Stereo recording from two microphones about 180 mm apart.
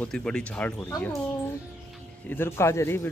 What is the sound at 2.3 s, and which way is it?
Speech, 15° left (ahead or behind).